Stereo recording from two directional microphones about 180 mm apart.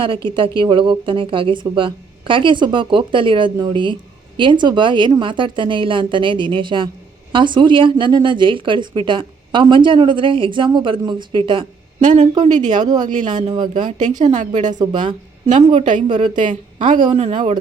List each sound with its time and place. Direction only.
0.0 s a woman's voice: 30° right (ahead or behind)
11.9 s a woman's voice: 40° right (ahead or behind)
12.8 s a woman's voice: 25° right (ahead or behind)
13.7 s a woman's voice: 45° right (ahead or behind)
14.6 s a woman's voice: 20° right (ahead or behind)
15.4 s a woman's voice: 45° right (ahead or behind)
16.0 s a woman's voice: 25° right (ahead or behind)
16.3 s a woman's voice: 45° right (ahead or behind)
17.0 s a woman's voice: 30° right (ahead or behind)